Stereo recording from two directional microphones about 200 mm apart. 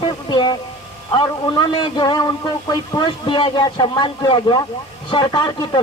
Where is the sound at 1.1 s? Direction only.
25° left (ahead or behind).